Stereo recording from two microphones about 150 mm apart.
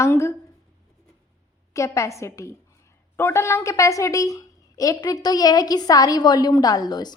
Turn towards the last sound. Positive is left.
turn(degrees=25)  # may be behind; listen again after turning